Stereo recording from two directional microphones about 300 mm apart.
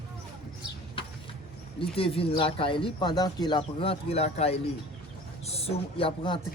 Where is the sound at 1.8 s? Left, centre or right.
Centre.